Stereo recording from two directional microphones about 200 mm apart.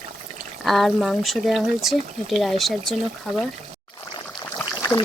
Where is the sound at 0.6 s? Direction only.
Centre (ahead or behind).